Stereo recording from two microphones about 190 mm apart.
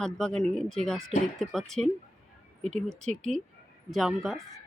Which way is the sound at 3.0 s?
40° right (ahead or behind).